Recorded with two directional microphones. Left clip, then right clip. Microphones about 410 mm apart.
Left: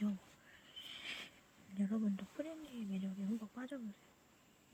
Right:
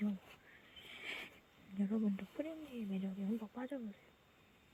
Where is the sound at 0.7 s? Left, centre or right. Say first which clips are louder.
Left 3 dB; centre.